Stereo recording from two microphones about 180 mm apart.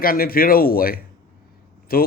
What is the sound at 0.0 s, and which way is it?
Speech, 55° left (ahead or behind).